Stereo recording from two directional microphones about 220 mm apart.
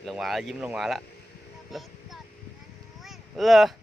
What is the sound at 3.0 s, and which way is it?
Vehicle, centre (ahead or behind).